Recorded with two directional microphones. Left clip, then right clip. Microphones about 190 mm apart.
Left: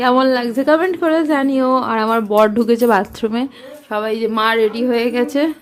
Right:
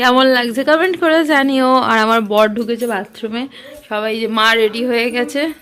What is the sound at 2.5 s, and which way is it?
Speech, 30° left (ahead or behind).